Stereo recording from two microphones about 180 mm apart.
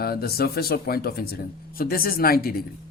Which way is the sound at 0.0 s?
60° left (ahead or behind).